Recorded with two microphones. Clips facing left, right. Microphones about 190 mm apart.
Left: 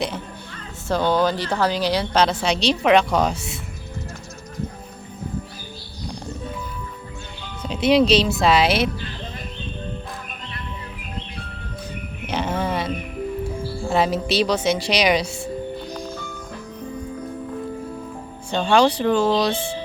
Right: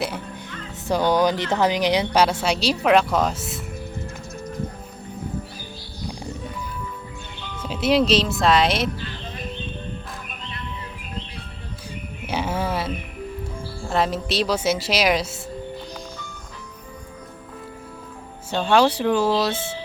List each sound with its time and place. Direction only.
0.9 s speech: 15° right (ahead or behind)
7.6 s a woman's voice: 5° right (ahead or behind)
12.2 s music: 10° right (ahead or behind)
13.9 s a woman's voice: centre (ahead or behind)
18.5 s speech: 5° right (ahead or behind)